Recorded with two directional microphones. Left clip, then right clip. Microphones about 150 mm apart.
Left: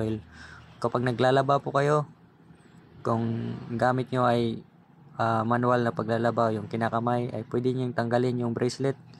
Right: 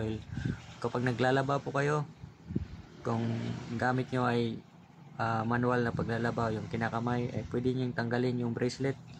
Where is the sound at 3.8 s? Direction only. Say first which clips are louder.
Left 7 dB; 25° left (ahead or behind).